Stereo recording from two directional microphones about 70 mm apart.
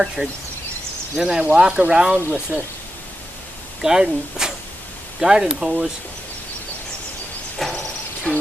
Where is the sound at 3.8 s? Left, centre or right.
Centre.